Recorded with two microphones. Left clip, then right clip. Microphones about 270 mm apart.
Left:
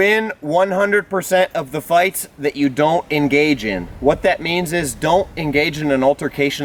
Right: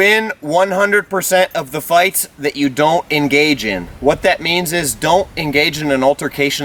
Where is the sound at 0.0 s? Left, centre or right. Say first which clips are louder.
Right 3 dB; centre.